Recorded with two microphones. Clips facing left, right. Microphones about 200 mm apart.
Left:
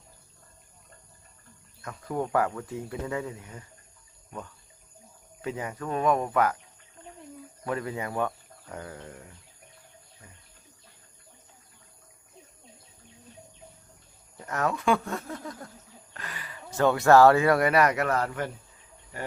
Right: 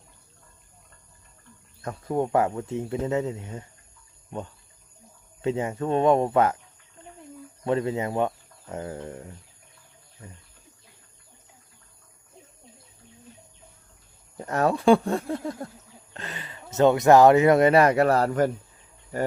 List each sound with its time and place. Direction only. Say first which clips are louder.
1.8 s speech: right 5 dB; 30° right (ahead or behind)
5.4 s speech: right 7 dB; 25° right (ahead or behind)
7.6 s speech: right 7 dB; 25° right (ahead or behind)
14.3 s speech: right 6 dB; 30° right (ahead or behind)